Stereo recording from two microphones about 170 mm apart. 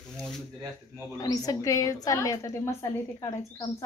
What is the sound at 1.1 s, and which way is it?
A woman's voice, 20° left (ahead or behind).